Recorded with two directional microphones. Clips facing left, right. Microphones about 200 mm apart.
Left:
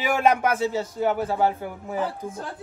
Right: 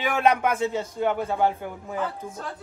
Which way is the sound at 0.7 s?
5° left (ahead or behind).